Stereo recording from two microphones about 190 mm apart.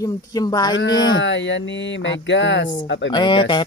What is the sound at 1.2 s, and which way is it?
Speech, 75° left (ahead or behind).